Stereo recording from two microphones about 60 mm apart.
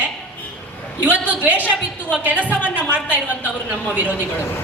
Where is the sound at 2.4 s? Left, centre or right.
Left.